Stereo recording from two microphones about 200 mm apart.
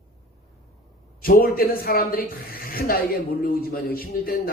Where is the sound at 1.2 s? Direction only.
45° left (ahead or behind).